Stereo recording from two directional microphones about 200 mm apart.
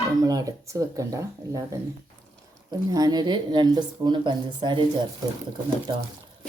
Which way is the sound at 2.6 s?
20° right (ahead or behind).